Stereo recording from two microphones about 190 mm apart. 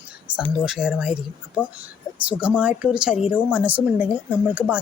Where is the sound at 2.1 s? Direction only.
5° right (ahead or behind).